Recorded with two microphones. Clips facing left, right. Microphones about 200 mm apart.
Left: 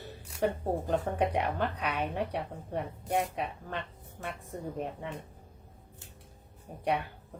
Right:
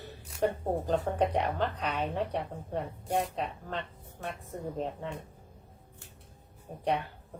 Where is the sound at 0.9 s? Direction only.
10° left (ahead or behind).